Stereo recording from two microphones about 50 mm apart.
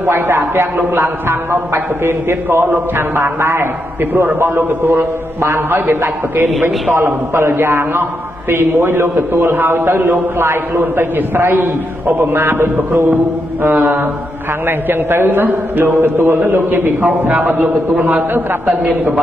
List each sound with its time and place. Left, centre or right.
0.0 s a man's voice: right
18.7 s a man's voice: right